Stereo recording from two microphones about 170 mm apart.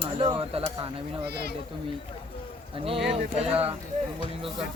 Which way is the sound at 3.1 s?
35° right (ahead or behind).